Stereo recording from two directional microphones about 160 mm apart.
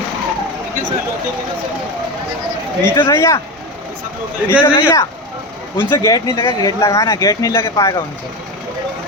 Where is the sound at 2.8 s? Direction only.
15° left (ahead or behind).